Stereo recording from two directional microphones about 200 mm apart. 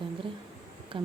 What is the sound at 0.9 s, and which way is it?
Speech, 25° right (ahead or behind).